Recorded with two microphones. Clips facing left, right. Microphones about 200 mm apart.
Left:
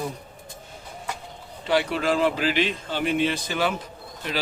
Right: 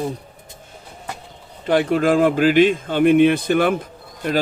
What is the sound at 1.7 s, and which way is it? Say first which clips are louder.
Speech: right 6 dB; 50° right (ahead or behind).